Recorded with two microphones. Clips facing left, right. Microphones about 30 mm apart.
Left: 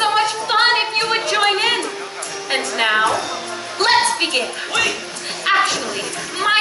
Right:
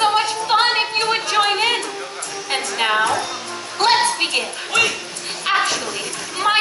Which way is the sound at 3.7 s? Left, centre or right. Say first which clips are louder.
Left 1 dB; centre.